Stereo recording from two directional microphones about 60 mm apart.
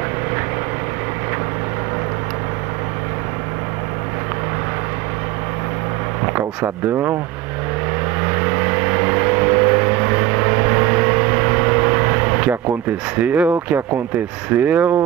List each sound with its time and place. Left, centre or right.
6.2 s a sound: right
8.2 s vehicle: right
13.1 s speech: right